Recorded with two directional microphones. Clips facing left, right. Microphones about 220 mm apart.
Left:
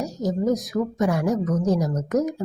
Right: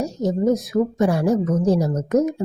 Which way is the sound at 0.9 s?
30° right (ahead or behind).